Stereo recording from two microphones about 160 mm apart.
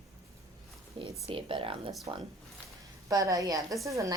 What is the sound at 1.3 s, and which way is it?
Speech, 35° right (ahead or behind).